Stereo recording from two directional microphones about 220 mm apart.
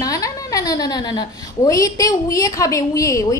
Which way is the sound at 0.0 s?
15° left (ahead or behind).